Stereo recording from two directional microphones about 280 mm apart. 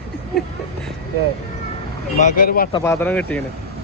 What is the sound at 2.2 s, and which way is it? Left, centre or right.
Speech, left.